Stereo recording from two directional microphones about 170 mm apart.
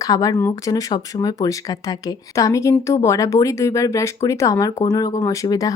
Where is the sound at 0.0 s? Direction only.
20° left (ahead or behind).